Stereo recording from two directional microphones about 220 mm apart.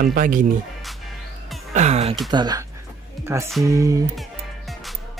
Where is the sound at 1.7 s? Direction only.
30° right (ahead or behind).